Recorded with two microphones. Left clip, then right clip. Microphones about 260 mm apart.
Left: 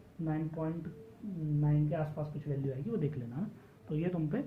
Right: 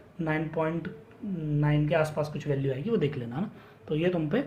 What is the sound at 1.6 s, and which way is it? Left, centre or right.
Speech, right.